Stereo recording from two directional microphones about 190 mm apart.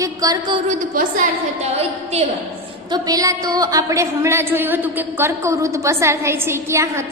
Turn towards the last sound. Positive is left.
turn(degrees=-15)  # may be behind; listen again after turning